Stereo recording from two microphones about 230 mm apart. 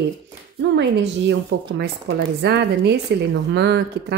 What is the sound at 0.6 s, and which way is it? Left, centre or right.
Speech, right.